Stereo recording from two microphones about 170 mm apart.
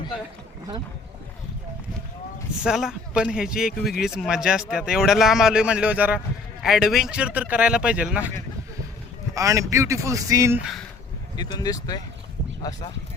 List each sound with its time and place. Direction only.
2.6 s speech: 5° right (ahead or behind)
9.3 s a man's voice: 20° right (ahead or behind)
11.3 s speech: 25° left (ahead or behind)